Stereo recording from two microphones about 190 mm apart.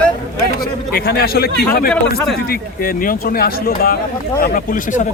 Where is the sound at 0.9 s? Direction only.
50° left (ahead or behind).